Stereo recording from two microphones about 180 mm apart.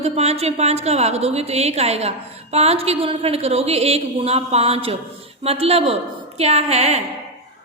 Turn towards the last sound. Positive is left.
turn(degrees=-35)  # may be behind; listen again after turning